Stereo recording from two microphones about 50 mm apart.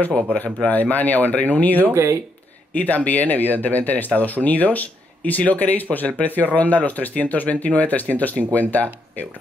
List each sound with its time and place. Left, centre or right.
0.0 s speech: left